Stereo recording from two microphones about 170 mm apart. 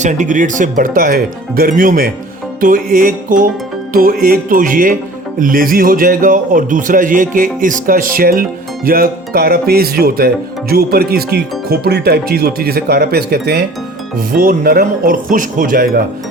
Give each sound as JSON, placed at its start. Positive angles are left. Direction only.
{"t": 0.0, "sound": "speech", "side_deg": -45}
{"t": 14.2, "sound": "speech", "side_deg": -55}